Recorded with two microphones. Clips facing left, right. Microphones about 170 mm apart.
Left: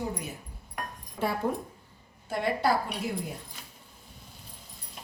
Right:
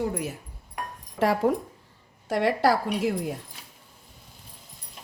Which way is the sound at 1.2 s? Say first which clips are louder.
Right 7 dB; 90° right.